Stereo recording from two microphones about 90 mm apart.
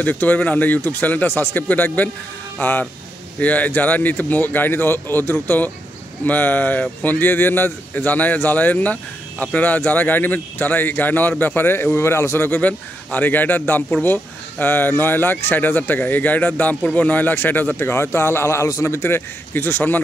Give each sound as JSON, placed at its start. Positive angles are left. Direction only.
{"t": 0.0, "sound": "speech", "side_deg": 20}